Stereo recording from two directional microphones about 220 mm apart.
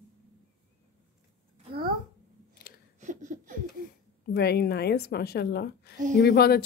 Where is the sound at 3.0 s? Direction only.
35° right (ahead or behind).